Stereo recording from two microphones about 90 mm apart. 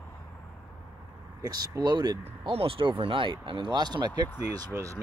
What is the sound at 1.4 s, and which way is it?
Speech, 45° right (ahead or behind).